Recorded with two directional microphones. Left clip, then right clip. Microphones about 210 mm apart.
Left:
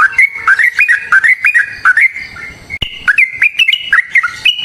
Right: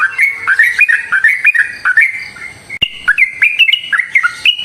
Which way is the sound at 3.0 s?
15° left (ahead or behind).